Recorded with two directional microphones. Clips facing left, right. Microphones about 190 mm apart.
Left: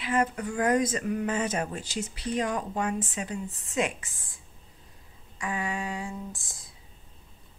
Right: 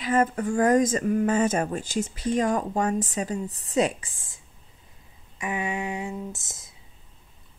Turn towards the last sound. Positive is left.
turn(degrees=-20)  # may be behind; listen again after turning